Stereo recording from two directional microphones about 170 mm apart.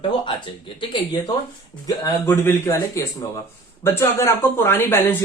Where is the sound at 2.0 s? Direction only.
15° left (ahead or behind).